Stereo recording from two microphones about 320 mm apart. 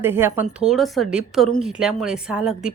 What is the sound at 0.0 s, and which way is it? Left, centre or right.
Speech, centre.